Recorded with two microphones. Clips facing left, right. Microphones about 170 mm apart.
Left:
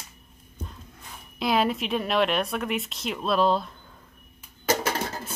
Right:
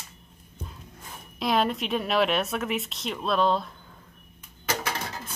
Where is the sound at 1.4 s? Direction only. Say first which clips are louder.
Left 1 dB; centre (ahead or behind).